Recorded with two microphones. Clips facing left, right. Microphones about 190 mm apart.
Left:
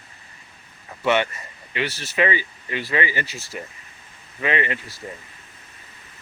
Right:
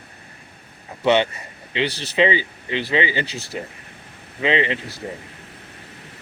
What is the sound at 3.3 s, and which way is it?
Speech, 65° right (ahead or behind).